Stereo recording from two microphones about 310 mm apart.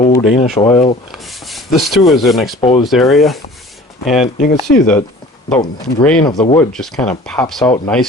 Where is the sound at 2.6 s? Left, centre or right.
Centre.